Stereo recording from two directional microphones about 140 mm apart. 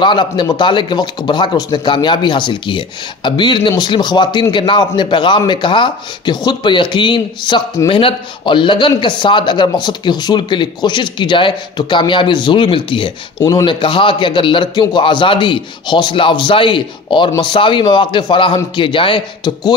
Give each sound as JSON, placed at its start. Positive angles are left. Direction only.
{"t": 0.0, "sound": "speech", "side_deg": 35}